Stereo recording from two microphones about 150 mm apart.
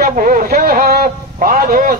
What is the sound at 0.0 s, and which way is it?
A man's voice, 65° right (ahead or behind).